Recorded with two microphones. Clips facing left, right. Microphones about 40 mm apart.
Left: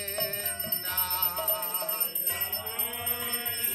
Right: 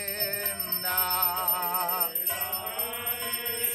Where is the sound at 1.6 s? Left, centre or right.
Right.